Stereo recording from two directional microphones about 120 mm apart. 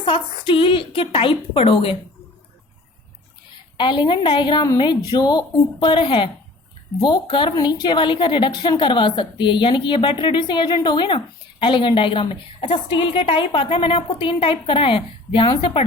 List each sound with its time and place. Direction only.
0.0 s a woman's voice: 45° left (ahead or behind)
3.8 s a woman's voice: 40° left (ahead or behind)